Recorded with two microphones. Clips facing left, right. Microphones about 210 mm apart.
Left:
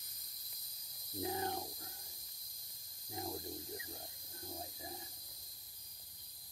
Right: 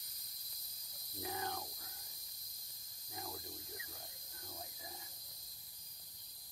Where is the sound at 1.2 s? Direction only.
25° left (ahead or behind).